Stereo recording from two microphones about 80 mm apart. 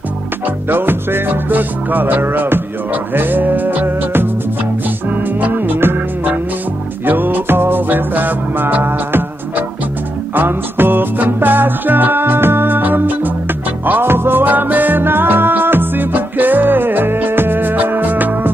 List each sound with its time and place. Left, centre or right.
0.7 s music: right
5.4 s music: right